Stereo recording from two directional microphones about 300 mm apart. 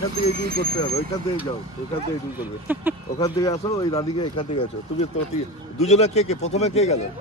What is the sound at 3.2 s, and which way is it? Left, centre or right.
Speech, centre.